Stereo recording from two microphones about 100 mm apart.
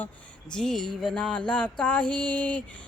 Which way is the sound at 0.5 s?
5° left (ahead or behind).